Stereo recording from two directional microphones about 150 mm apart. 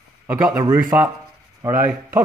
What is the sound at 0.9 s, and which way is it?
A man's voice, 15° right (ahead or behind).